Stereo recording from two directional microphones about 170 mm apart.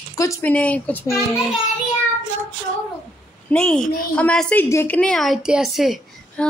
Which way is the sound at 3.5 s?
5° left (ahead or behind).